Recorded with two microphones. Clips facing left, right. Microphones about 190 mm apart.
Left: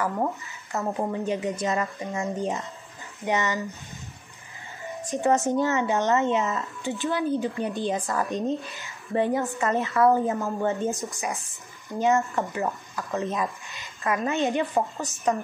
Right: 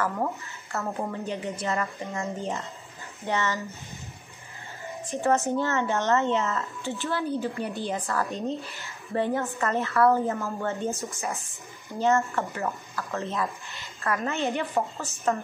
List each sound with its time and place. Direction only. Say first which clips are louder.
0.0 s speech: left 2 dB; 15° left (ahead or behind)
5.0 s speech: left 2 dB; 15° left (ahead or behind)